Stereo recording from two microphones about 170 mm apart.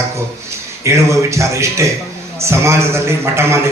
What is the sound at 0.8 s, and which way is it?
A man's voice, 15° right (ahead or behind).